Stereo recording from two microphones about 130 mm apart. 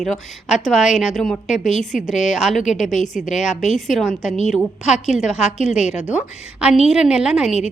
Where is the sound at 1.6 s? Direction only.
65° left (ahead or behind).